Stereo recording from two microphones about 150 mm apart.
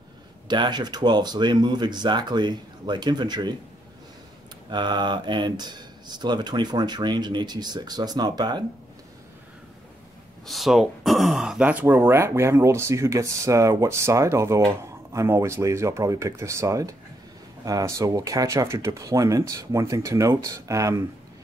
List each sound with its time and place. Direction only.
0.5 s speech: 30° right (ahead or behind)
4.6 s speech: 30° right (ahead or behind)
10.4 s speech: centre (ahead or behind); by 21.0 s 20° right (ahead or behind)